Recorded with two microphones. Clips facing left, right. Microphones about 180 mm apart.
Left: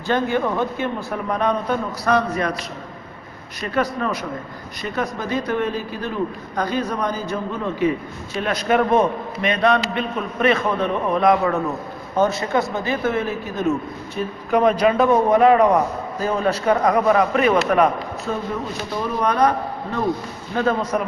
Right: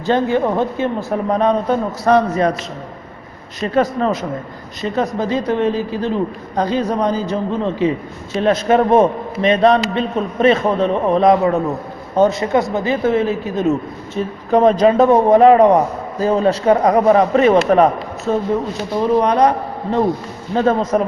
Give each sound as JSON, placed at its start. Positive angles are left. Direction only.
{"t": 0.1, "sound": "a man's voice", "side_deg": -25}
{"t": 3.6, "sound": "a man's voice", "side_deg": -25}
{"t": 19.2, "sound": "a man's voice", "side_deg": -20}